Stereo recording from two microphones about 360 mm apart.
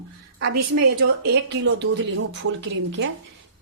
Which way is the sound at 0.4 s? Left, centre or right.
Right.